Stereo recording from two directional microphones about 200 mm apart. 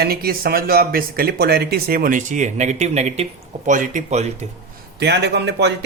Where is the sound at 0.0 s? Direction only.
50° right (ahead or behind); by 4.4 s 35° right (ahead or behind).